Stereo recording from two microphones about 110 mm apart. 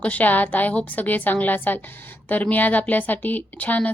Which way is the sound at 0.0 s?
15° left (ahead or behind).